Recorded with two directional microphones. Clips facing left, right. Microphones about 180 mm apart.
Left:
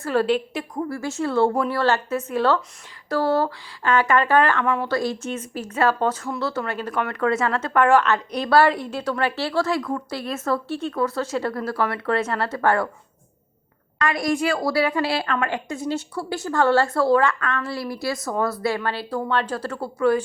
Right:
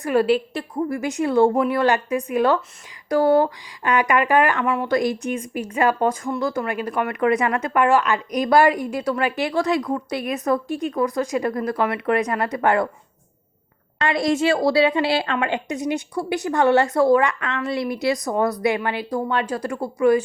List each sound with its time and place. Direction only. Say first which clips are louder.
0.0 s speech: right 2 dB; 10° right (ahead or behind)
0.9 s speech: right 5 dB; 15° right (ahead or behind)
4.9 s speech: right 3 dB; 15° right (ahead or behind)
14.0 s a woman's voice: right 2 dB; 25° right (ahead or behind)